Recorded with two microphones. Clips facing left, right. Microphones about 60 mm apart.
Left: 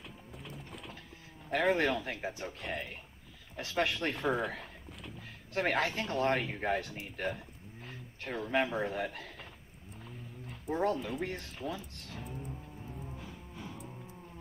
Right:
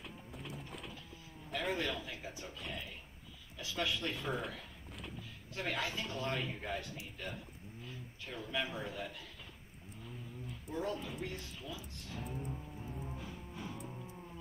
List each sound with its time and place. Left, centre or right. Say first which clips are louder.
0.0 s clip-clop: even; centre
1.5 s speech: left 8 dB; left
7.8 s a sound: left 5 dB; left
10.7 s speech: left 8 dB; left